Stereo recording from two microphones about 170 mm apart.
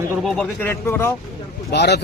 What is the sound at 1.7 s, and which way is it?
Speech, 80° left.